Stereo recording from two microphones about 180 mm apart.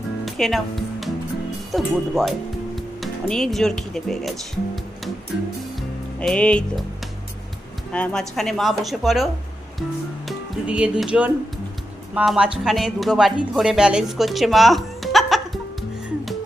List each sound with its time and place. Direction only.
0.3 s music: centre (ahead or behind)
1.7 s speech: centre (ahead or behind)
6.1 s speech: 5° left (ahead or behind)
7.9 s speech: 5° left (ahead or behind)
16.0 s music: centre (ahead or behind)